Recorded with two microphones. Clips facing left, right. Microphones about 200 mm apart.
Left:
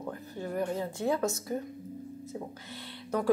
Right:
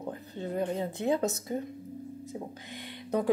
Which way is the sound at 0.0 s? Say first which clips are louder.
Right 1 dB; 20° right (ahead or behind).